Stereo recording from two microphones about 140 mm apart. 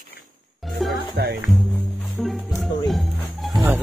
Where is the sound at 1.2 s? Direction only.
90° right.